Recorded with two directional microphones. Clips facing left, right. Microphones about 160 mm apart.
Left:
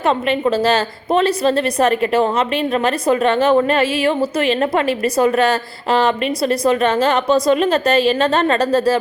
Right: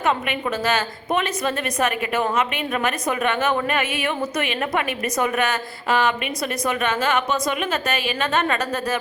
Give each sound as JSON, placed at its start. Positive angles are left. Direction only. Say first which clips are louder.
{"t": 0.0, "sound": "a woman's voice", "louder": "left 6 dB", "side_deg": 30}